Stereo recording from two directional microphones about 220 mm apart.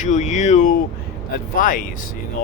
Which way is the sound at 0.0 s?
35° left (ahead or behind).